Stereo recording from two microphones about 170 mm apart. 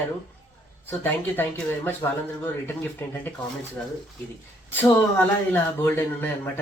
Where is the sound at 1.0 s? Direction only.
10° left (ahead or behind).